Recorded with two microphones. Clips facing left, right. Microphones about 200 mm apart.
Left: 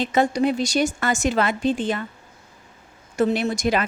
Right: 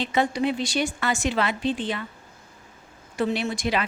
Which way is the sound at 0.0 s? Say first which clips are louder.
Left 4 dB; 45° left (ahead or behind).